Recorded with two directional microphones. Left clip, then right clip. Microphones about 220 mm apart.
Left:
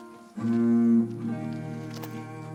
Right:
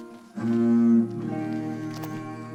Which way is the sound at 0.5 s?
45° right (ahead or behind).